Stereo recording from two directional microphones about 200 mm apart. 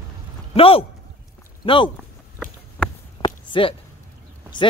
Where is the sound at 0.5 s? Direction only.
30° left (ahead or behind).